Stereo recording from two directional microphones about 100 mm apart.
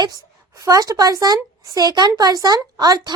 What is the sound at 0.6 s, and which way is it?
Speech, 35° right (ahead or behind).